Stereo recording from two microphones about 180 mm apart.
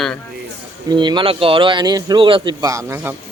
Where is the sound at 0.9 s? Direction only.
25° right (ahead or behind).